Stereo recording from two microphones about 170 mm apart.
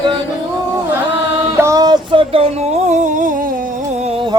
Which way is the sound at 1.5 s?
15° right (ahead or behind).